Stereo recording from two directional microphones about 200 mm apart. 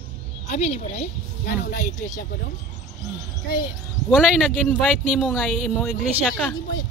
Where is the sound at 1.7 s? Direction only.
40° left (ahead or behind).